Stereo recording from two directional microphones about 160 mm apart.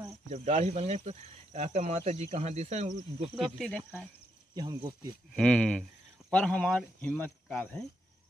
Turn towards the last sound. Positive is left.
turn(degrees=10)  # may be behind; listen again after turning